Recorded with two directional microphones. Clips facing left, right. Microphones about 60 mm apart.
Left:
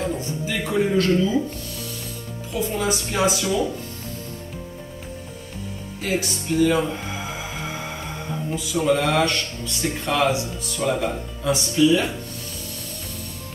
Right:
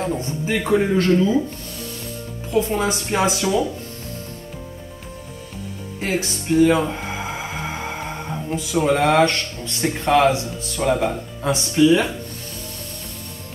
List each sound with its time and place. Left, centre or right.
0.2 s speech: right
2.5 s speech: right
5.9 s speech: right
8.5 s speech: right